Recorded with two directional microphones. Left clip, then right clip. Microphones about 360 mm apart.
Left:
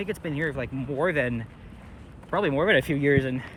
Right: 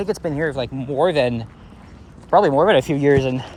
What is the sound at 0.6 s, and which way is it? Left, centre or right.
Speech, centre.